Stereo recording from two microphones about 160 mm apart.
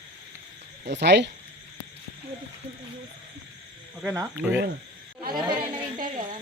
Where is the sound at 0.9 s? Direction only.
90° right.